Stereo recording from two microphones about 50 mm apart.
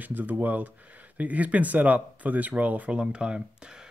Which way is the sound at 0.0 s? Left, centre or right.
Right.